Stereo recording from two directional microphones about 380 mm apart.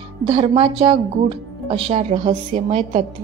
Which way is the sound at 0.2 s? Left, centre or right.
Centre.